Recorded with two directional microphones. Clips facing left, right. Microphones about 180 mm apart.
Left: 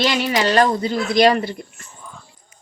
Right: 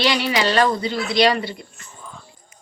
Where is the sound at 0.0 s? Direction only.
45° left (ahead or behind).